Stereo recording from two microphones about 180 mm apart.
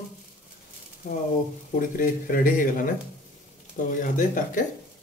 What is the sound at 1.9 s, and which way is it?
Speech, 50° left (ahead or behind).